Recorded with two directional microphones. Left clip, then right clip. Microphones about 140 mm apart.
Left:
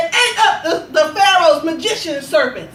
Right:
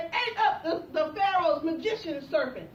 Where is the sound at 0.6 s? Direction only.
15° left (ahead or behind).